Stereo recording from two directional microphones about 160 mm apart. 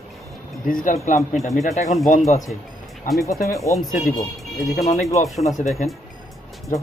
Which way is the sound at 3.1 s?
60° left (ahead or behind).